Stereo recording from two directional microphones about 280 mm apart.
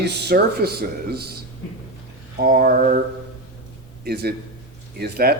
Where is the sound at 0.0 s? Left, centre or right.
Right.